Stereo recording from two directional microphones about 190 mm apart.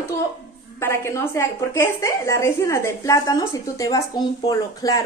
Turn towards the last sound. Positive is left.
turn(degrees=20)  # may be behind; listen again after turning